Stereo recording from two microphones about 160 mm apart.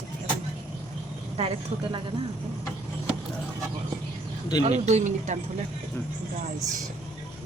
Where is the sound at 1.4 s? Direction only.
40° right (ahead or behind).